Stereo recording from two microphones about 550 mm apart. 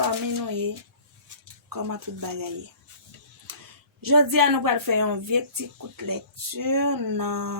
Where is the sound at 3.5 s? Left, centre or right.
Right.